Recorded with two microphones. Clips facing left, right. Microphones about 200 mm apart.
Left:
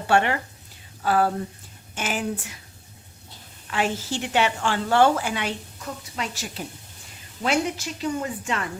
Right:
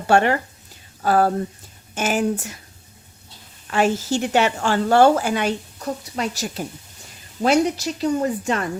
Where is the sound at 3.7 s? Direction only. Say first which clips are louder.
Right 6 dB; 45° right (ahead or behind).